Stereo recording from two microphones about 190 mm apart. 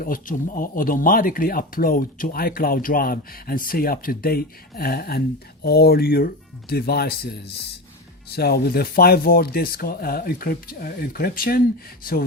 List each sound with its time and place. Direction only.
0.0 s speech: 50° left (ahead or behind)